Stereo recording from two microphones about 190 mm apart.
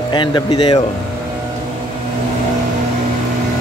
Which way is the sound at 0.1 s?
25° left (ahead or behind).